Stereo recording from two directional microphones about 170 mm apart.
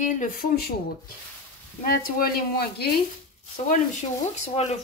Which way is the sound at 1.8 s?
55° left (ahead or behind).